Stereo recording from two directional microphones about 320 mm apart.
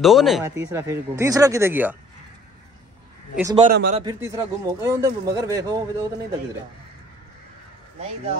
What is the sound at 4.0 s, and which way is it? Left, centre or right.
Speech, centre.